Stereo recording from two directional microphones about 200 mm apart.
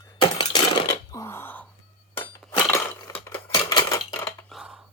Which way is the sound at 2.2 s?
10° left (ahead or behind).